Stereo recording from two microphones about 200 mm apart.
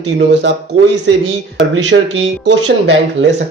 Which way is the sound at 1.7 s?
70° right (ahead or behind).